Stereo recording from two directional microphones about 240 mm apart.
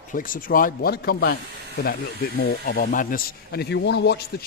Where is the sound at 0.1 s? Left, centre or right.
Left.